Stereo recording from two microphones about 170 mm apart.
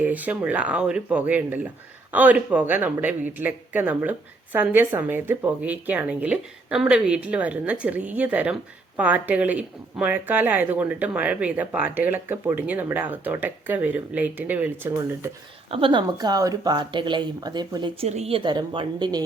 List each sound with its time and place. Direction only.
0.0 s speech: 10° right (ahead or behind)
15.7 s speech: 30° right (ahead or behind)